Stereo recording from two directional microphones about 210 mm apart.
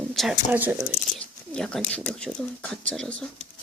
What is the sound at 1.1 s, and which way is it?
Speech, 5° left (ahead or behind).